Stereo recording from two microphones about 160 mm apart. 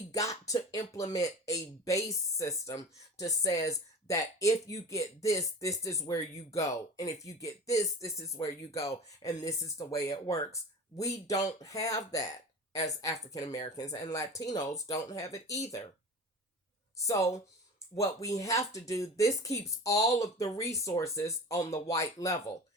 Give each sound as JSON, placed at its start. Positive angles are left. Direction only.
{"t": 0.1, "sound": "a sound", "side_deg": 20}
{"t": 0.9, "sound": "speech", "side_deg": 20}
{"t": 17.1, "sound": "speech", "side_deg": 20}